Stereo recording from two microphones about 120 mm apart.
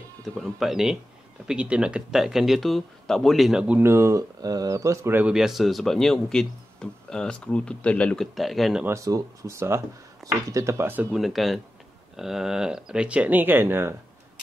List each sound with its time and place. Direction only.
0.2 s speech: centre (ahead or behind); by 5.2 s 20° right (ahead or behind)
5.2 s speech: 5° right (ahead or behind)
8.8 s speech: 25° right (ahead or behind)
11.1 s speech: centre (ahead or behind); by 13.9 s 20° right (ahead or behind)